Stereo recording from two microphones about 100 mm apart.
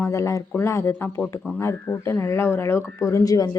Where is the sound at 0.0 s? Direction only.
30° left (ahead or behind).